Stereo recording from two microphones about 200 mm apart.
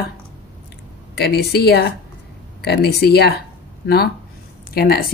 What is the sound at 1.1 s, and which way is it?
A woman's voice, 55° left (ahead or behind).